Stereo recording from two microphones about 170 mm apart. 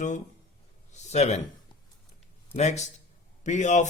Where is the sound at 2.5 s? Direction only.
40° left (ahead or behind).